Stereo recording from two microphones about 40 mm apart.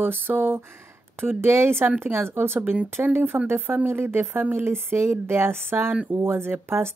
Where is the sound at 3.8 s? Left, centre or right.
Right.